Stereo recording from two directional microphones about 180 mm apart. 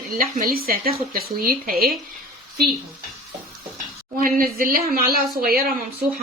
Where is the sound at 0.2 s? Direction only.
55° right (ahead or behind).